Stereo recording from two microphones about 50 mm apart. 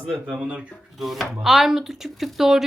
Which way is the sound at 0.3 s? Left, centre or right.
Right.